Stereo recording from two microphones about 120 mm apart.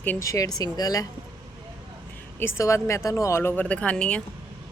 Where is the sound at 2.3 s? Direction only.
20° left (ahead or behind).